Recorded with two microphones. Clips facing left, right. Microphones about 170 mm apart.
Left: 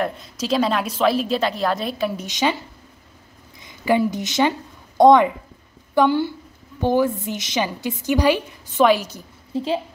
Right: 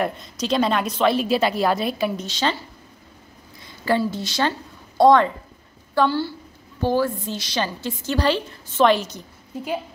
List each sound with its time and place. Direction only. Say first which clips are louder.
0.0 s a woman's voice: even; 5° left (ahead or behind)
2.1 s a woman's voice: left 2 dB; 15° left (ahead or behind)
3.6 s a woman's voice: left 3 dB; 15° left (ahead or behind)